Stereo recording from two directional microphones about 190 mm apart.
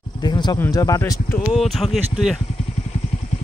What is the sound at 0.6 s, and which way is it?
Speech, 15° left (ahead or behind).